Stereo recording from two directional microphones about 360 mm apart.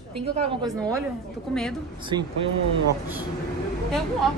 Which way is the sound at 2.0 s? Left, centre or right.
Centre.